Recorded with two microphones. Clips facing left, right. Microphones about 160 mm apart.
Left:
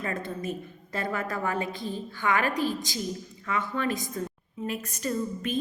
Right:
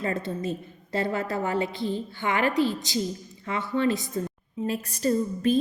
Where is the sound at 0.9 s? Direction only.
25° right (ahead or behind).